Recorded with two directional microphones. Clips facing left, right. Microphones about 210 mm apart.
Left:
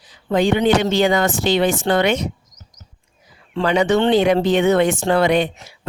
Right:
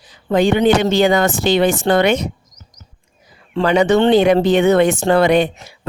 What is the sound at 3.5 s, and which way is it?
Speech, 50° right (ahead or behind).